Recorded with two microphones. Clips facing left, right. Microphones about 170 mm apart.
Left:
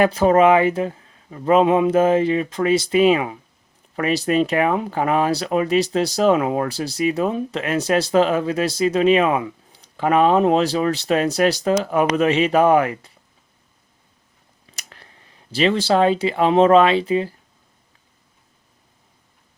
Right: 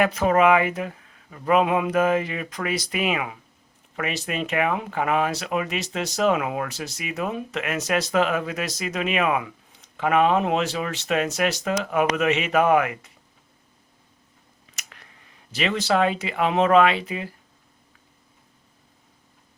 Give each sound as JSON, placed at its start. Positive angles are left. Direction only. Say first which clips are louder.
{"t": 0.0, "sound": "speech", "louder": "left 5 dB", "side_deg": 30}
{"t": 14.7, "sound": "scissors", "louder": "left 2 dB", "side_deg": 35}
{"t": 15.5, "sound": "speech", "louder": "left 5 dB", "side_deg": 30}